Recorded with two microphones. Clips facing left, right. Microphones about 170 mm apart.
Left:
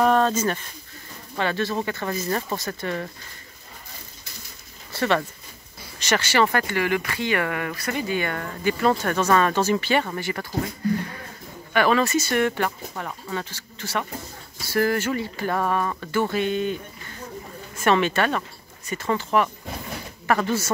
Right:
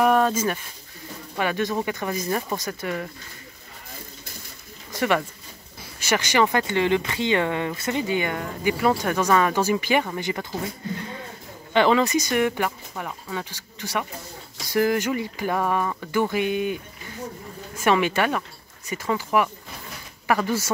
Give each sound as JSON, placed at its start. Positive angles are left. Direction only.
{"t": 0.0, "sound": "speech", "side_deg": -10}
{"t": 4.9, "sound": "speech", "side_deg": -10}
{"t": 17.7, "sound": "speech", "side_deg": -10}